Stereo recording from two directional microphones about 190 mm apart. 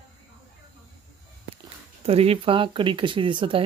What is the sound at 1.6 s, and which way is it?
Speech, 30° right (ahead or behind).